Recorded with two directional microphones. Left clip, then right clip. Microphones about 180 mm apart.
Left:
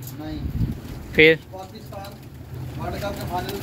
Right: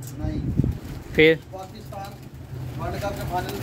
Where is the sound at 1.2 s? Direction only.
15° right (ahead or behind).